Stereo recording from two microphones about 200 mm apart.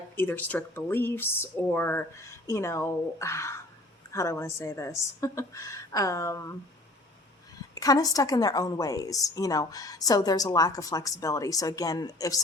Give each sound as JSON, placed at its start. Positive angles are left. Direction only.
{"t": 0.2, "sound": "a woman's voice", "side_deg": 10}
{"t": 7.8, "sound": "a woman's voice", "side_deg": 20}